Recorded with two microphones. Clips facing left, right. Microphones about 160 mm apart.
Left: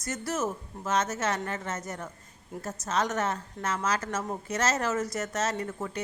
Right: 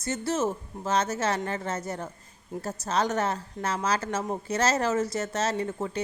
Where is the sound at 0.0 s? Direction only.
30° right (ahead or behind).